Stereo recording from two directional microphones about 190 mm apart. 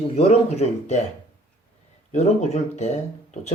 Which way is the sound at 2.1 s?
35° left (ahead or behind).